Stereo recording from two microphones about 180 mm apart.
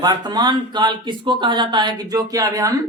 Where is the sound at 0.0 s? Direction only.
25° right (ahead or behind).